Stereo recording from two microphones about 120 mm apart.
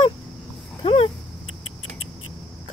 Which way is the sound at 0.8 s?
50° left (ahead or behind).